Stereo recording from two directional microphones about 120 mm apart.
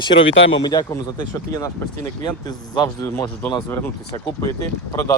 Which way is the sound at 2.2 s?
35° left (ahead or behind).